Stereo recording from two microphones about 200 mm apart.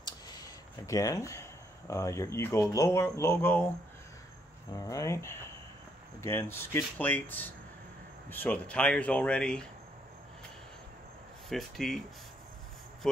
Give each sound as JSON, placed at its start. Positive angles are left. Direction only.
{"t": 0.8, "sound": "speech", "side_deg": 15}
{"t": 4.7, "sound": "speech", "side_deg": 15}
{"t": 11.4, "sound": "speech", "side_deg": 0}
{"t": 13.0, "sound": "speech", "side_deg": 0}